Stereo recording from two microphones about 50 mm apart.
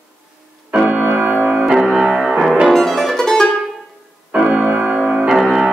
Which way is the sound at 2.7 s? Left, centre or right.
Centre.